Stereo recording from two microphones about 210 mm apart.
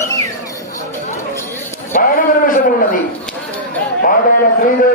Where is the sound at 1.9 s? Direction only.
40° left (ahead or behind).